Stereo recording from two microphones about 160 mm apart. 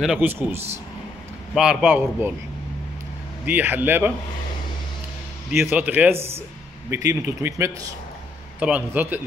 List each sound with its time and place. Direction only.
0.0 s speech: 5° right (ahead or behind)
3.4 s speech: 10° right (ahead or behind)
5.6 s speech: 10° right (ahead or behind)